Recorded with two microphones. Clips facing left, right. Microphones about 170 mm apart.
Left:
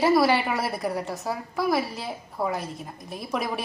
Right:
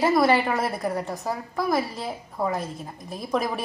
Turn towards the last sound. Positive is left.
turn(degrees=0)  # may be behind; listen again after turning